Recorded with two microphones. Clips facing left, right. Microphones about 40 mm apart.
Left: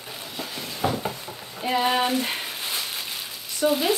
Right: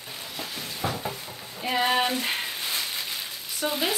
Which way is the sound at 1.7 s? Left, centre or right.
Centre.